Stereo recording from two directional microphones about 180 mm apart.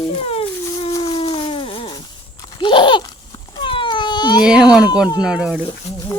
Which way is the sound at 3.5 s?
25° left (ahead or behind).